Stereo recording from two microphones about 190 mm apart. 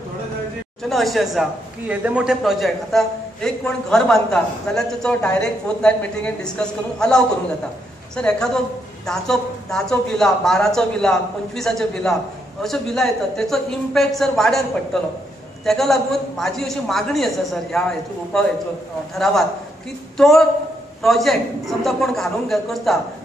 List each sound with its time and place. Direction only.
0.8 s speech: centre (ahead or behind)
15.6 s speech: centre (ahead or behind)